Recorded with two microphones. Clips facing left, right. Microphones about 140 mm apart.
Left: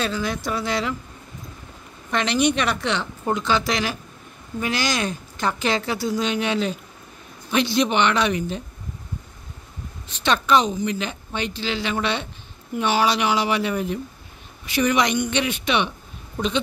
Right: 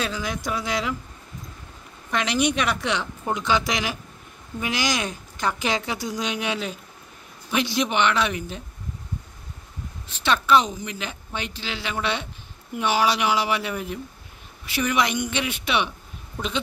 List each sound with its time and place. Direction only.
0.0 s a woman's voice: 10° right (ahead or behind)
2.0 s a woman's voice: 10° right (ahead or behind)
10.2 s a woman's voice: 10° right (ahead or behind)